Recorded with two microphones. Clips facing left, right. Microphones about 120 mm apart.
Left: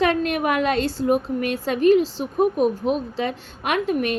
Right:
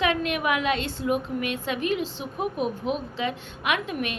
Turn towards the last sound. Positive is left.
turn(degrees=40)  # may be behind; listen again after turning